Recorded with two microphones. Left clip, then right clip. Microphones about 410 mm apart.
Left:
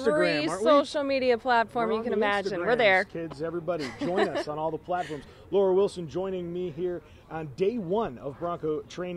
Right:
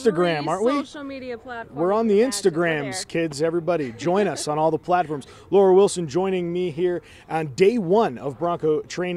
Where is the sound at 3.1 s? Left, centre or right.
Right.